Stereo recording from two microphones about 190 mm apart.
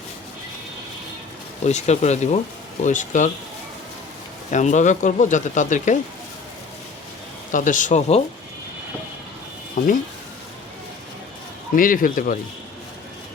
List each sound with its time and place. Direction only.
1.6 s speech: 35° left (ahead or behind)
4.5 s speech: 40° left (ahead or behind)
7.5 s speech: 40° left (ahead or behind)
9.8 s speech: 40° left (ahead or behind)
11.7 s speech: 45° left (ahead or behind)